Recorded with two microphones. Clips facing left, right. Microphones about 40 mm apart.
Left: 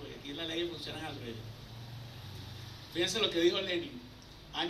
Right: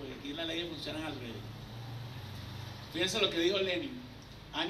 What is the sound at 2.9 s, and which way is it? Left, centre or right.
Speech, right.